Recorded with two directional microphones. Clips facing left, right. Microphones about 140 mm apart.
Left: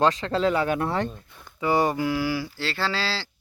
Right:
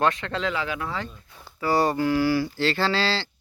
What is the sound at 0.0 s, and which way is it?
Speech, 30° left (ahead or behind).